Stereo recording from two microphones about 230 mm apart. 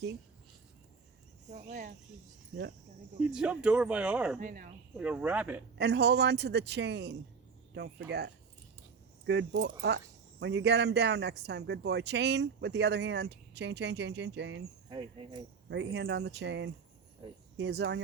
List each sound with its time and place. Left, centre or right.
1.5 s speech: right
3.2 s speech: centre
4.4 s speech: right
4.9 s speech: centre
5.7 s speech: right
9.2 s speech: right
14.8 s speech: right
15.7 s speech: right